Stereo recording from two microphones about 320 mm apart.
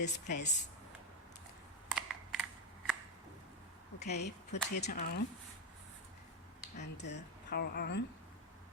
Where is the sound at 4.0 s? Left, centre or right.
Left.